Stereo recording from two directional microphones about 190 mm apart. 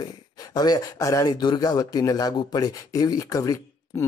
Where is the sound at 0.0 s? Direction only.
20° left (ahead or behind).